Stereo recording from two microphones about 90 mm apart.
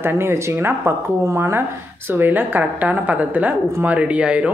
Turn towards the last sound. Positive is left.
turn(degrees=-15)  # may be behind; listen again after turning